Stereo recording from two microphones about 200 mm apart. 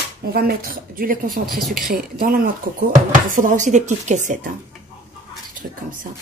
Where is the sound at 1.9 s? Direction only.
45° right (ahead or behind).